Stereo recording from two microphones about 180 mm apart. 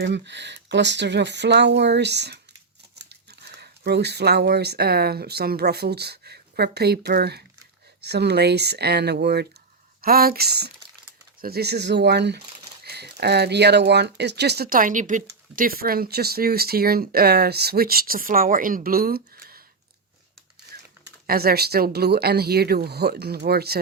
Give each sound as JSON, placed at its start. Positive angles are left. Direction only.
{"t": 0.0, "sound": "speech", "side_deg": -75}
{"t": 21.2, "sound": "speech", "side_deg": -60}